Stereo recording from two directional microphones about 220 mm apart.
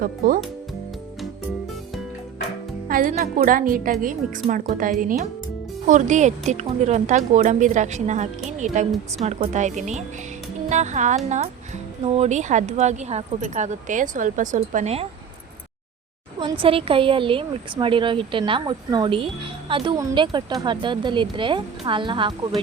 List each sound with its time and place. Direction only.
0.2 s speech: 40° right (ahead or behind)
2.9 s speech: 35° right (ahead or behind)
16.4 s a woman's voice: 25° right (ahead or behind)